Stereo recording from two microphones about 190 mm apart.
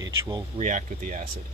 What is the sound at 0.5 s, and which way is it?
Speech, 40° right (ahead or behind).